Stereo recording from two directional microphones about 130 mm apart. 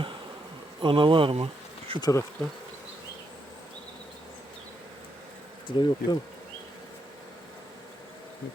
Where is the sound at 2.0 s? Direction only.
25° left (ahead or behind).